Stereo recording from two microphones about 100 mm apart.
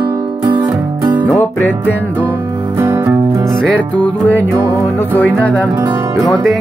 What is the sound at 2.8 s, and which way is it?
Music, 30° right (ahead or behind).